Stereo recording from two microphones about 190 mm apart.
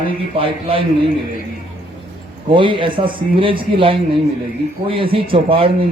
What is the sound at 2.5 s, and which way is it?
Speech, 25° right (ahead or behind).